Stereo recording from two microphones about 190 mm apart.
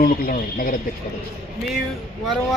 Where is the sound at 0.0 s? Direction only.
45° left (ahead or behind).